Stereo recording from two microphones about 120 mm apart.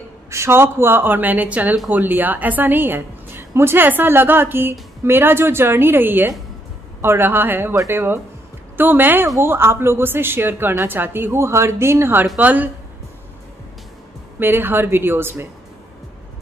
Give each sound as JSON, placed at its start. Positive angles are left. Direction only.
{"t": 0.3, "sound": "a woman's voice", "side_deg": -20}
{"t": 14.4, "sound": "a woman's voice", "side_deg": -15}